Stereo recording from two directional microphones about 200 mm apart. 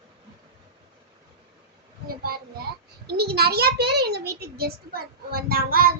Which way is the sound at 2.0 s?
50° right (ahead or behind).